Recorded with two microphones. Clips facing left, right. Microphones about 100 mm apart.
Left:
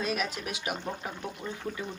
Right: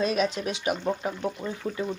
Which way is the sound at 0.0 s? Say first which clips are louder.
Right 7 dB; 25° right (ahead or behind).